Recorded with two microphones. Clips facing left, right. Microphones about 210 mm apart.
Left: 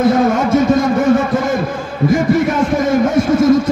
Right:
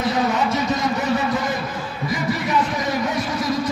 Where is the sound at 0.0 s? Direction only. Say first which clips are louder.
Left 8 dB; 50° left (ahead or behind).